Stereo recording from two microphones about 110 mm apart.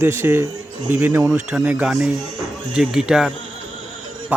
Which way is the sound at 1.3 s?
10° right (ahead or behind).